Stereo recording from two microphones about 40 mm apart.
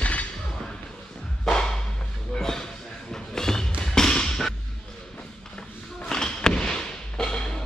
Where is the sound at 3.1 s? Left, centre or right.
Centre.